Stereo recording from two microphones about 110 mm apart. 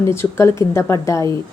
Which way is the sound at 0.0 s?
25° left (ahead or behind).